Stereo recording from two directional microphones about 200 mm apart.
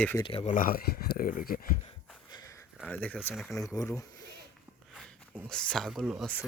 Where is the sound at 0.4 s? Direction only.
40° left (ahead or behind).